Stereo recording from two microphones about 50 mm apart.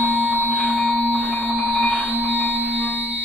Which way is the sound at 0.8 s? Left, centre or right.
Left.